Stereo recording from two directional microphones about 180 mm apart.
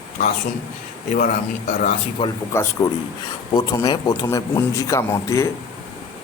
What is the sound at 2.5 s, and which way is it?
Speech, 15° left (ahead or behind).